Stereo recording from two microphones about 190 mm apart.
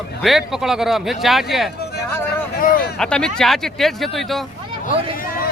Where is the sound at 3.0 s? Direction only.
5° left (ahead or behind).